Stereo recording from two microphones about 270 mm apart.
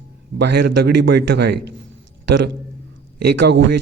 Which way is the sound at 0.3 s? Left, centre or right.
Right.